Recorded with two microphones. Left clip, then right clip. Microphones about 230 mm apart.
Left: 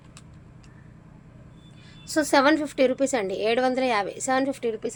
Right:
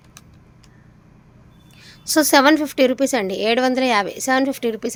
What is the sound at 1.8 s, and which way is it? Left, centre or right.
A woman's voice, right.